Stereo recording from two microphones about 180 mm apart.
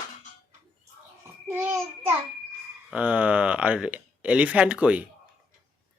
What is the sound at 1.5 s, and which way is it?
Child singing, 10° right (ahead or behind).